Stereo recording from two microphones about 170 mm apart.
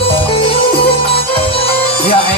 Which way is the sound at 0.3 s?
30° left (ahead or behind).